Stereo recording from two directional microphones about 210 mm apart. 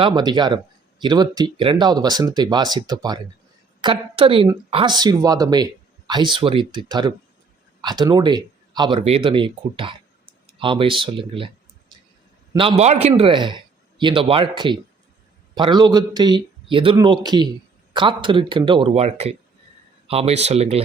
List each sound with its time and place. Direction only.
0.0 s speech: 20° right (ahead or behind)
12.5 s speech: 30° right (ahead or behind)